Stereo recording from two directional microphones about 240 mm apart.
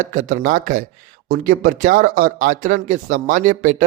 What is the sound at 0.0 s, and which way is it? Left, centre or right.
Speech, right.